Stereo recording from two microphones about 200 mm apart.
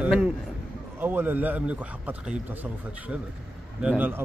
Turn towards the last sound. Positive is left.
turn(degrees=-10)  # may be behind; listen again after turning